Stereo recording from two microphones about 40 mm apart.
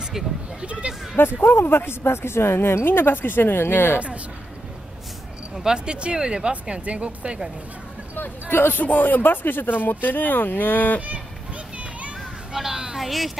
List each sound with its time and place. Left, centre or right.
0.6 s speech: right
1.1 s speech: left
5.6 s speech: centre; by 7.3 s right
8.5 s speech: left
8.8 s speech: left
12.5 s a sound: centre
12.9 s a woman's voice: centre